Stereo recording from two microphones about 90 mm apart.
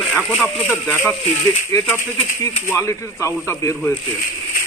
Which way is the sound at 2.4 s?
30° left (ahead or behind).